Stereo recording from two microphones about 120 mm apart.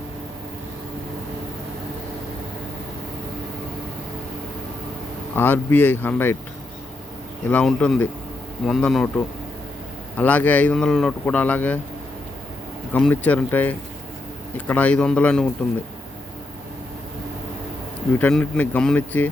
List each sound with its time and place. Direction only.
5.3 s speech: 15° left (ahead or behind)
7.4 s speech: 10° left (ahead or behind)
12.9 s speech: 10° left (ahead or behind)
18.2 s speech: 10° left (ahead or behind)